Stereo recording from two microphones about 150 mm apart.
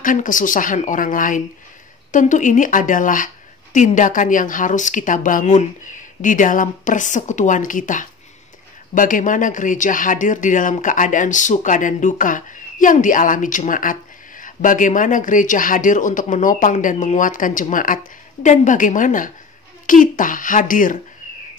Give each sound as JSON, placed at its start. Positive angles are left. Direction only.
{"t": 0.0, "sound": "speech", "side_deg": 60}